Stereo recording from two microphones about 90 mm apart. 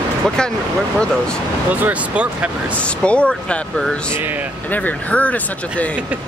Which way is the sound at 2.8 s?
15° left (ahead or behind).